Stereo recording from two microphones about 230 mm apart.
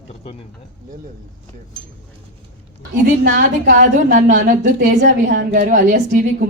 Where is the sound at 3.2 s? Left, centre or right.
Right.